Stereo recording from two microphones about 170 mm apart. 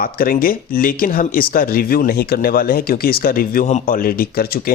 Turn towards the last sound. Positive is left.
turn(degrees=60)  # may be behind; listen again after turning